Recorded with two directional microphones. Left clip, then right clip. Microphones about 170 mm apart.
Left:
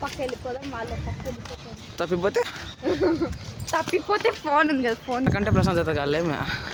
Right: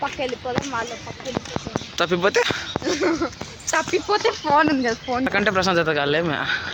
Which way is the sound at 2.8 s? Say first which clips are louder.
Right 1 dB; 30° right (ahead or behind).